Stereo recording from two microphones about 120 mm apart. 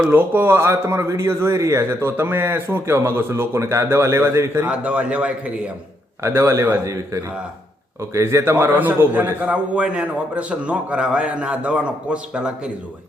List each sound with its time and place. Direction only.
0.0 s a man's voice: 15° right (ahead or behind)
6.2 s a man's voice: 25° right (ahead or behind); by 12.7 s 10° right (ahead or behind)